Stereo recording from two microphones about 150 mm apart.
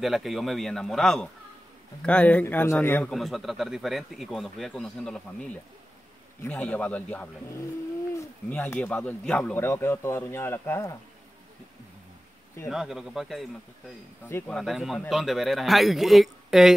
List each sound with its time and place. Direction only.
0.0 s speech: centre (ahead or behind); by 3.1 s 15° left (ahead or behind)
3.1 s speech: centre (ahead or behind); by 11.0 s 15° left (ahead or behind)
12.6 s speech: centre (ahead or behind)
14.6 s speech: centre (ahead or behind)